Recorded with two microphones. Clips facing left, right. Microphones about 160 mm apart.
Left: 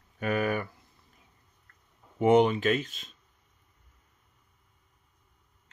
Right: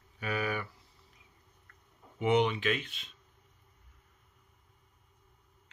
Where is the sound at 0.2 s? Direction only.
45° left (ahead or behind).